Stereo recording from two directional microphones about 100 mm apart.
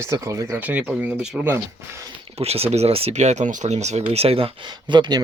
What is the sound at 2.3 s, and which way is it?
Speech, 85° right.